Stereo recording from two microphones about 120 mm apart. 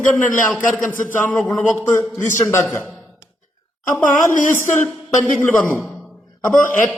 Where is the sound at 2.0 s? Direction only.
25° left (ahead or behind).